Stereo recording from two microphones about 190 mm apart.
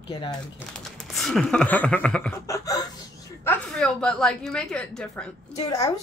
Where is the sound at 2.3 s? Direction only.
15° left (ahead or behind).